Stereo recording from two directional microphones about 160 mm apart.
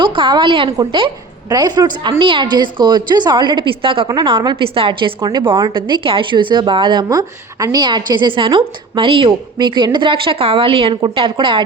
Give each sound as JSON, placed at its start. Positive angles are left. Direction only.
{"t": 0.0, "sound": "a woman's voice", "side_deg": -30}